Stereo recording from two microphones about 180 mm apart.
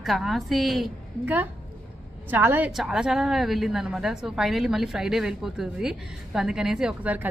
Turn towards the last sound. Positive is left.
turn(degrees=-10)  # may be behind; listen again after turning